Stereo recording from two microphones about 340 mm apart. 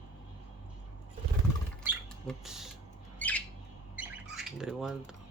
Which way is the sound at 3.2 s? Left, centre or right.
Centre.